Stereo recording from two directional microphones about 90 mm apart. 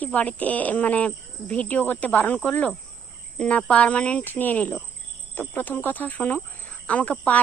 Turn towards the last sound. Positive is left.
turn(degrees=15)  # may be behind; listen again after turning